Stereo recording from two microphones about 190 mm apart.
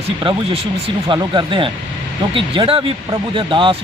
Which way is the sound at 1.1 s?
25° right (ahead or behind).